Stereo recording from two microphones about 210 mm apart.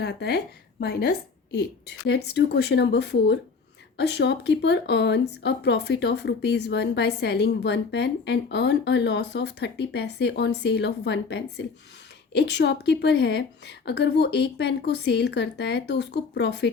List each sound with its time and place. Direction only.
0.0 s a woman's voice: 50° left (ahead or behind)